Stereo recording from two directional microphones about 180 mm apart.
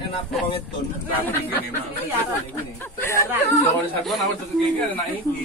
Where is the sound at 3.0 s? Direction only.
15° left (ahead or behind).